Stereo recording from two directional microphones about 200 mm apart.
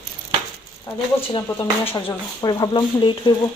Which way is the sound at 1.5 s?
10° left (ahead or behind).